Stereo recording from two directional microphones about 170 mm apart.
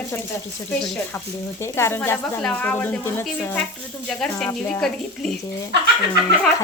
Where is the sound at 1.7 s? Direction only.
15° left (ahead or behind).